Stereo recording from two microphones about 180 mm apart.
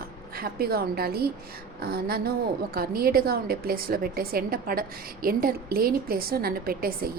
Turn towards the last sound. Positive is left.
turn(degrees=-55)  # may be behind; listen again after turning